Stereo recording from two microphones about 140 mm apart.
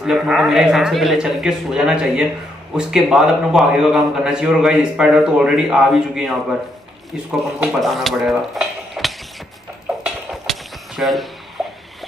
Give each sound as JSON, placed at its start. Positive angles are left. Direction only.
{"t": 0.0, "sound": "a man's voice", "side_deg": -5}
{"t": 7.6, "sound": "speech", "side_deg": 0}
{"t": 10.0, "sound": "a sound", "side_deg": 0}
{"t": 11.6, "sound": "music", "side_deg": 0}